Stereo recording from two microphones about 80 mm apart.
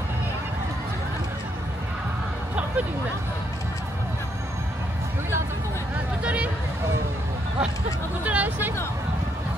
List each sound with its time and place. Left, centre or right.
6.2 s speech: centre
8.2 s speech: centre